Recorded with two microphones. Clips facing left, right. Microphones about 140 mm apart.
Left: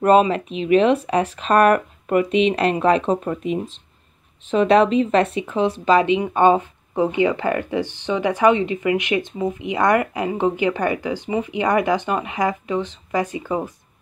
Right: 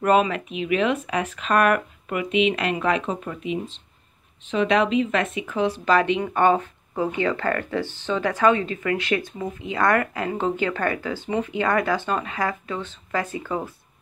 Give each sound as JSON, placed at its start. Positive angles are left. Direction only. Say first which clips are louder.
{"t": 0.0, "sound": "speech", "louder": "left 5 dB", "side_deg": 30}